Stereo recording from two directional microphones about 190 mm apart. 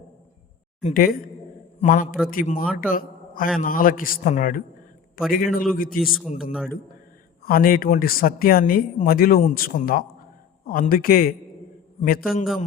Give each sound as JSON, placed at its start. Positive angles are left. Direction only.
{"t": 0.8, "sound": "a man's voice", "side_deg": 45}
{"t": 6.4, "sound": "a man's voice", "side_deg": -5}
{"t": 7.4, "sound": "speech", "side_deg": 50}